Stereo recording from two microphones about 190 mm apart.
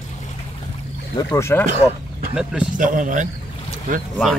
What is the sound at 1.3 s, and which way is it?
Speech, 15° left (ahead or behind).